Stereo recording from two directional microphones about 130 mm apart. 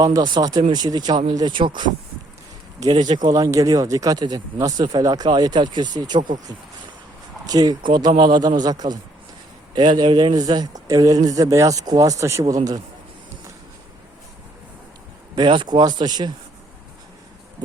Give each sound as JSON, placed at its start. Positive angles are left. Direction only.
{"t": 0.0, "sound": "a man's voice", "side_deg": -30}
{"t": 7.4, "sound": "a man's voice", "side_deg": -30}
{"t": 15.4, "sound": "speech", "side_deg": -35}